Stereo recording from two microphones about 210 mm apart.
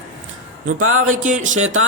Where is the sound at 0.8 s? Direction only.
85° right.